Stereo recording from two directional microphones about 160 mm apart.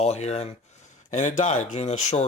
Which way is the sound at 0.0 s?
40° left (ahead or behind).